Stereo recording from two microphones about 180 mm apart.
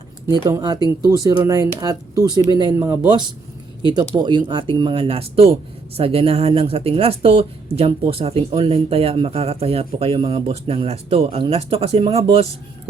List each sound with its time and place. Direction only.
0.4 s speech: 20° right (ahead or behind)